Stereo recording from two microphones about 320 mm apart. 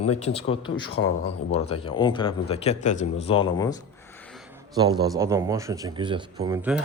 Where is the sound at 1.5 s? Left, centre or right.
Centre.